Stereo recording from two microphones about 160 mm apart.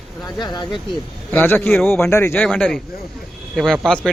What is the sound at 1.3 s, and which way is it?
Speech, 10° left (ahead or behind).